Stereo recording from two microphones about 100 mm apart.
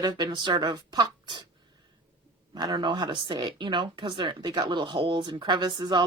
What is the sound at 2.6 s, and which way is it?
Speech, 45° right (ahead or behind).